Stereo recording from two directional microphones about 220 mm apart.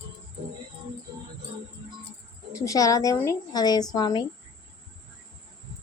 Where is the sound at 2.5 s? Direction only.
15° left (ahead or behind).